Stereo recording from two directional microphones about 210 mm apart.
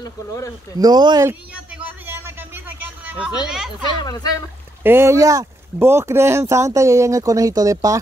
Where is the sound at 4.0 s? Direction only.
20° left (ahead or behind).